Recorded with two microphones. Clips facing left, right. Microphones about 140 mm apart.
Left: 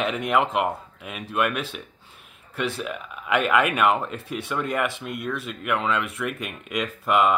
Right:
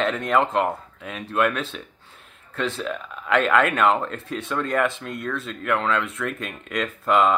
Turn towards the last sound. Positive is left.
turn(degrees=10)  # may be behind; listen again after turning